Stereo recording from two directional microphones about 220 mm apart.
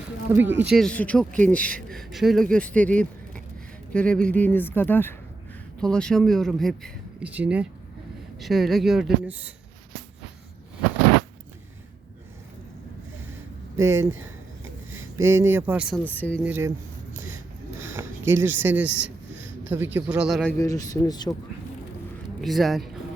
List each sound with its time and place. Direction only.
0.3 s speech: 10° right (ahead or behind)
0.7 s speech: 5° left (ahead or behind)
13.7 s speech: 10° right (ahead or behind)
16.0 s speech: 5° left (ahead or behind)
16.4 s speech: 10° right (ahead or behind)
17.2 s a sound: 10° right (ahead or behind)
19.6 s speech: 10° right (ahead or behind)
20.6 s speech: 15° left (ahead or behind)
22.4 s speech: centre (ahead or behind)